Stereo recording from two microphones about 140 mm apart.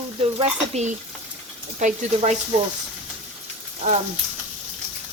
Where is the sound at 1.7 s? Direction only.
60° right (ahead or behind).